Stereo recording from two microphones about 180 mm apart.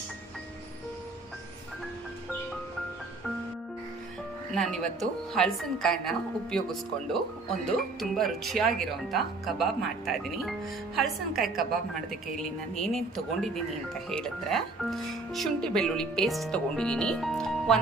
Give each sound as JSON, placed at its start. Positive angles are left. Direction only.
{"t": 4.5, "sound": "speech", "side_deg": 5}
{"t": 10.9, "sound": "speech", "side_deg": 0}
{"t": 12.7, "sound": "speech", "side_deg": 0}